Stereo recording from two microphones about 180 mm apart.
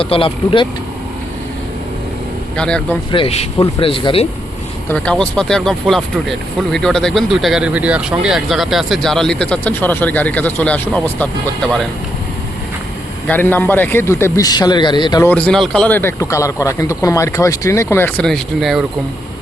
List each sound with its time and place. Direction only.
0.0 s speech: 30° left (ahead or behind)
2.6 s speech: 5° left (ahead or behind)
3.1 s speech: 30° left (ahead or behind)
4.9 s speech: 5° left (ahead or behind)
13.2 s speech: 10° left (ahead or behind)
15.3 s speech: 5° left (ahead or behind)